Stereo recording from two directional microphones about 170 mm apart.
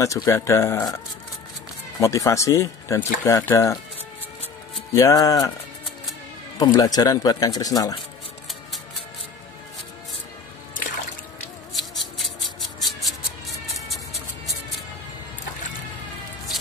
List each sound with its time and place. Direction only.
0.0 s speech: 20° left (ahead or behind)
4.9 s speech: 20° left (ahead or behind)
6.6 s speech: 20° left (ahead or behind)
11.7 s scissors: centre (ahead or behind)
13.8 s music: centre (ahead or behind)